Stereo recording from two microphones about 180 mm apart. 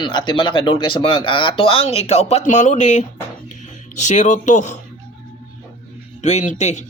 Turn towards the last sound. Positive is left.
turn(degrees=40)  # may be behind; listen again after turning